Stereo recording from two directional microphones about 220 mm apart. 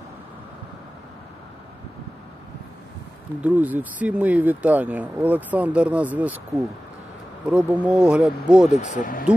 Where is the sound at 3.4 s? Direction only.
5° right (ahead or behind).